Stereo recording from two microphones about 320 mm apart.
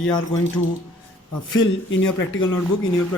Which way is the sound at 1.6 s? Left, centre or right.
Left.